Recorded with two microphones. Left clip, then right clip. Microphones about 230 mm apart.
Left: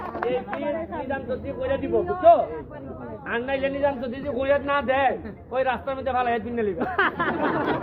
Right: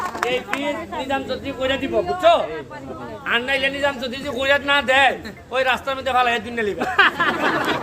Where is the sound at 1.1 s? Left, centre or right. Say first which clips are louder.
Right 7 dB; right.